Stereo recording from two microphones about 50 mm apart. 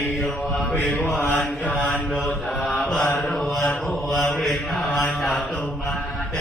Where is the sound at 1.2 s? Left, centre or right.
Left.